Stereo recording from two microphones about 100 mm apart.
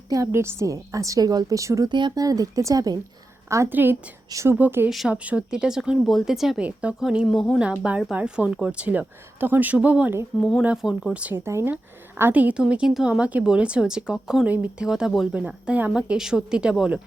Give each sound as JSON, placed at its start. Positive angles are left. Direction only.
{"t": 0.1, "sound": "a woman's voice", "side_deg": -30}
{"t": 1.9, "sound": "a woman's voice", "side_deg": -50}
{"t": 3.5, "sound": "a woman's voice", "side_deg": -25}
{"t": 4.3, "sound": "a woman's voice", "side_deg": -30}
{"t": 4.5, "sound": "a woman's voice", "side_deg": -20}
{"t": 4.9, "sound": "a woman's voice", "side_deg": -5}
{"t": 7.3, "sound": "speech", "side_deg": 5}
{"t": 8.1, "sound": "a woman's voice", "side_deg": -15}
{"t": 11.3, "sound": "a woman's voice", "side_deg": -25}